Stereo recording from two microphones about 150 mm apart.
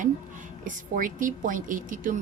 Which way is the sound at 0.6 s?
60° right (ahead or behind).